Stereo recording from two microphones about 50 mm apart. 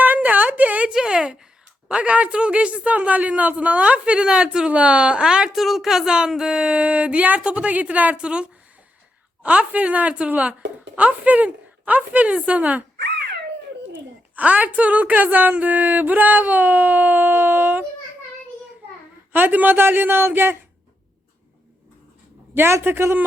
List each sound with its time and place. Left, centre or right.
0.0 s a sound: right
0.9 s a sound: centre
1.9 s a man's voice: right
5.5 s a man's voice: centre; by 12.8 s right
14.3 s a woman's voice: right
19.3 s a woman's voice: right
22.8 s speech: right